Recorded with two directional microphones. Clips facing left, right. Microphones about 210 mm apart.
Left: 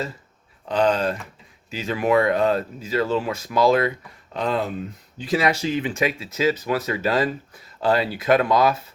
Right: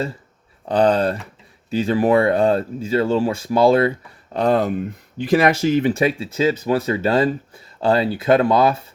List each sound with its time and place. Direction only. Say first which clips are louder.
0.7 s speech: right 4 dB; 35° right (ahead or behind)
4.4 s speech: right 6 dB; 45° right (ahead or behind)